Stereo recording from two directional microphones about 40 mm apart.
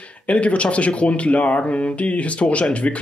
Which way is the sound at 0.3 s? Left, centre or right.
Left.